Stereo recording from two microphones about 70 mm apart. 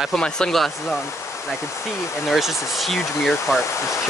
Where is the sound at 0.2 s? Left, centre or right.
Centre.